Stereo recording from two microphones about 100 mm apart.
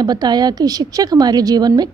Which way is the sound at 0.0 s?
45° right (ahead or behind).